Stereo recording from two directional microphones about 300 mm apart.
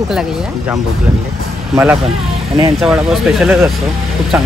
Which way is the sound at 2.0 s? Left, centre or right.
Centre.